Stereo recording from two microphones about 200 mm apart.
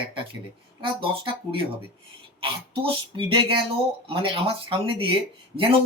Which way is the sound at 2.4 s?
25° right (ahead or behind).